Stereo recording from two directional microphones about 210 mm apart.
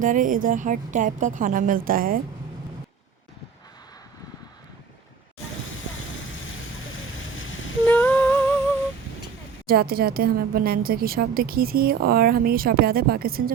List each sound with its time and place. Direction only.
0.0 s a woman's voice: 40° right (ahead or behind)
7.9 s humming: 10° left (ahead or behind)
9.6 s speech: 45° right (ahead or behind)